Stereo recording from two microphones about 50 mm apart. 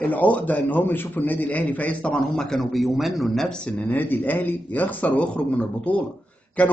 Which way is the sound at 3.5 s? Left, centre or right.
Centre.